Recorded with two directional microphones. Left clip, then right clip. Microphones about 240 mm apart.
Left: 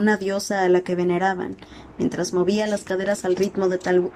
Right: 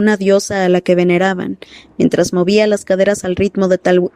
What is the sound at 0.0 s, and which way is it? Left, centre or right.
Speech, right.